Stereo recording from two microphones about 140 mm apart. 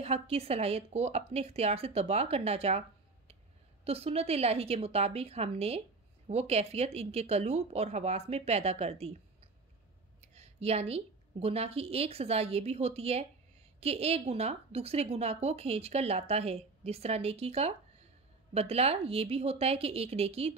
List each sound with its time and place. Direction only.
0.0 s a woman's voice: 45° right (ahead or behind)
3.8 s a woman's voice: 45° right (ahead or behind)